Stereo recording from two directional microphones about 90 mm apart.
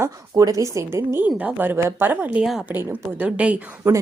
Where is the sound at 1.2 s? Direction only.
15° right (ahead or behind).